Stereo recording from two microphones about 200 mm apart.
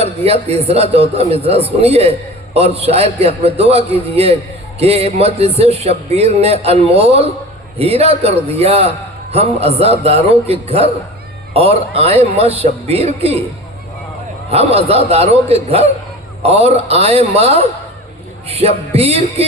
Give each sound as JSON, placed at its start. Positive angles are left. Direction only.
{"t": 0.0, "sound": "a man's voice", "side_deg": -30}
{"t": 14.5, "sound": "a man's voice", "side_deg": -30}